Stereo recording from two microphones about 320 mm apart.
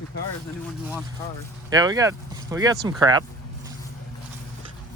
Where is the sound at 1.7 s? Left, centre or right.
Centre.